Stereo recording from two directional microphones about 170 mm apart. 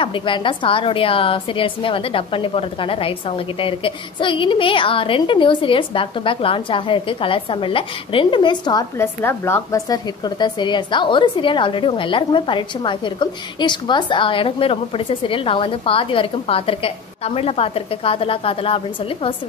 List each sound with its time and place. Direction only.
0.0 s a woman's voice: 30° left (ahead or behind)